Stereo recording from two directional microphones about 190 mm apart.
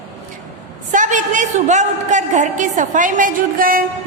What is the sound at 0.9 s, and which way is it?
A woman's voice, 40° right (ahead or behind).